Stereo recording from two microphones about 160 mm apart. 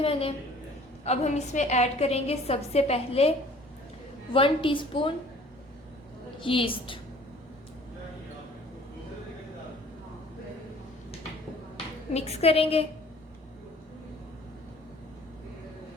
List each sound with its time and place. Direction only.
0.0 s a woman's voice: 35° left (ahead or behind)
4.4 s a woman's voice: 35° left (ahead or behind)
6.4 s a woman's voice: 35° left (ahead or behind)
12.1 s a woman's voice: 40° left (ahead or behind)